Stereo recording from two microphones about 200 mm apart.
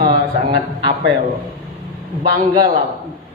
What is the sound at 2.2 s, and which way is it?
Speech, 45° right (ahead or behind).